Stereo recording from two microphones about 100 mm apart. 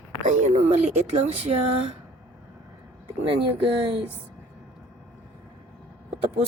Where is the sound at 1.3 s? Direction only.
90° right.